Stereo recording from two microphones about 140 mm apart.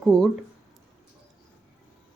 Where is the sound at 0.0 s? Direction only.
5° left (ahead or behind).